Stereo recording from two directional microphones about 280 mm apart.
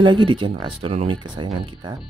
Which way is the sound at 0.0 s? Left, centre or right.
Centre.